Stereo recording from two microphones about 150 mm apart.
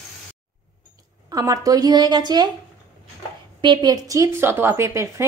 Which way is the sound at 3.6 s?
30° right (ahead or behind).